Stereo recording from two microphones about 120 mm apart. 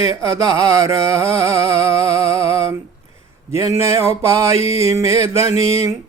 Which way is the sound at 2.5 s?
25° right (ahead or behind).